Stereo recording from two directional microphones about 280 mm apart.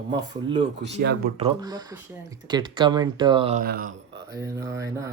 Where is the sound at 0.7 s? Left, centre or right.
Right.